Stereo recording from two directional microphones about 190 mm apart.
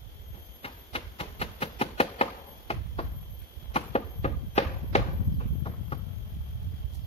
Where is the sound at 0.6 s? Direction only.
30° left (ahead or behind).